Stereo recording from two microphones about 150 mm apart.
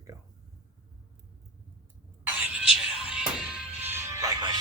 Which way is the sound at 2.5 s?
5° right (ahead or behind).